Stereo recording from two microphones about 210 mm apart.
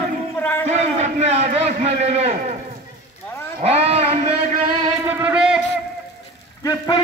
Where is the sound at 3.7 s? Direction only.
30° right (ahead or behind).